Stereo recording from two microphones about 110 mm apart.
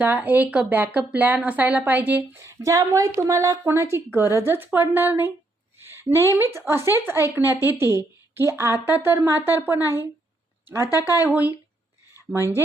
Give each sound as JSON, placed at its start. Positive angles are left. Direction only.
{"t": 0.0, "sound": "a woman's voice", "side_deg": -15}
{"t": 5.8, "sound": "a sound", "side_deg": -20}
{"t": 6.7, "sound": "a woman's voice", "side_deg": -25}
{"t": 11.3, "sound": "speech", "side_deg": -15}